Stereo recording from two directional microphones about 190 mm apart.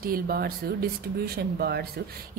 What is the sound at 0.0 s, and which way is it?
A woman's voice, 50° right (ahead or behind).